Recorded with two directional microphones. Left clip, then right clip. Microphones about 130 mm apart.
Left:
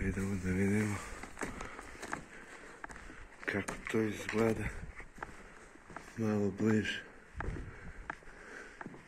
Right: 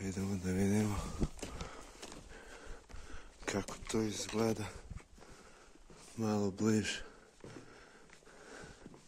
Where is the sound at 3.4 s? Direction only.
85° right.